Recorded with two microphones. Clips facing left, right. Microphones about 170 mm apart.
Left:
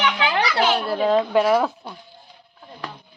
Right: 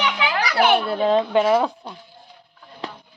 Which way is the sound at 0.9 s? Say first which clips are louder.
Even; centre (ahead or behind).